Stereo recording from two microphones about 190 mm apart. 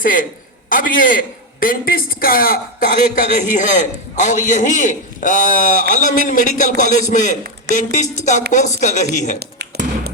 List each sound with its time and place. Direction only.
0.0 s a man's voice: 45° left (ahead or behind)
9.4 s tap: 60° right (ahead or behind)